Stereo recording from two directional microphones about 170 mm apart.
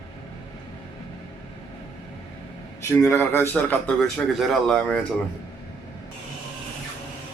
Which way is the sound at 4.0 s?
Centre (ahead or behind).